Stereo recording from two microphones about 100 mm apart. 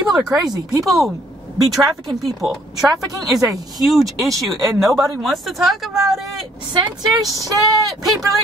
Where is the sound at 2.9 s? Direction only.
35° right (ahead or behind).